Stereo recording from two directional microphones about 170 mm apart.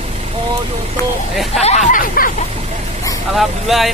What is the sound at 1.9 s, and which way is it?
Speech, 55° left (ahead or behind).